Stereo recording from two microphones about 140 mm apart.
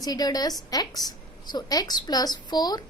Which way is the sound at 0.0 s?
30° left (ahead or behind).